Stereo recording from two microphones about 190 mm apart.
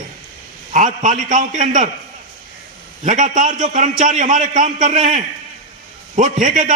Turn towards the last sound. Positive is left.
turn(degrees=-45)  # may be behind; listen again after turning